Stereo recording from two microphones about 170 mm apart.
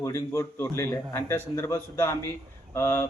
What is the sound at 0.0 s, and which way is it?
Speech, 15° left (ahead or behind).